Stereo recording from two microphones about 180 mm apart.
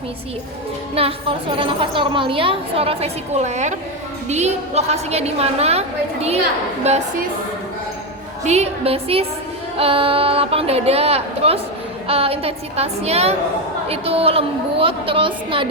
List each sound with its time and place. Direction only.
0.9 s a woman's voice: 30° right (ahead or behind)
8.4 s a woman's voice: 35° right (ahead or behind)